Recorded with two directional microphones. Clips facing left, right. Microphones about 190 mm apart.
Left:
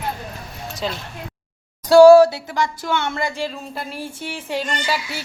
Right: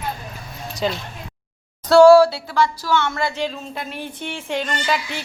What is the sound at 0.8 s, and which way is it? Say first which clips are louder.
Speech: right 4 dB; centre (ahead or behind).